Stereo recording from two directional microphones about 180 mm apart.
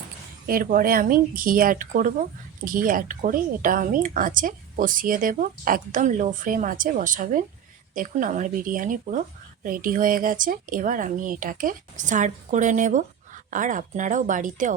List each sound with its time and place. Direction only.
0.4 s speech: 55° right (ahead or behind)